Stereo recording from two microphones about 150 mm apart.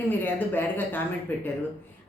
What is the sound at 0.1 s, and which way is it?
Speech, 10° left (ahead or behind).